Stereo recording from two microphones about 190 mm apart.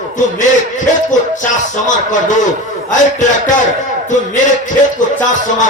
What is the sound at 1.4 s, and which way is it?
A man's voice, 40° left (ahead or behind).